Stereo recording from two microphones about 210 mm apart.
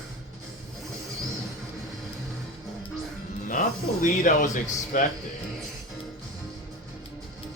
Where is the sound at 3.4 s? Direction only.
40° left (ahead or behind).